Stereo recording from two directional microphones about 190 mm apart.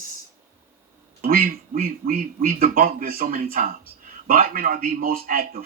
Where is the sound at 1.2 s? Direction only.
50° right (ahead or behind).